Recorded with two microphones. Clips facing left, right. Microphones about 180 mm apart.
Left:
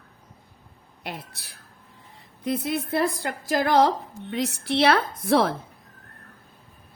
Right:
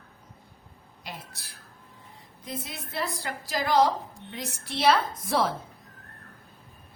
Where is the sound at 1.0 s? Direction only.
65° left (ahead or behind).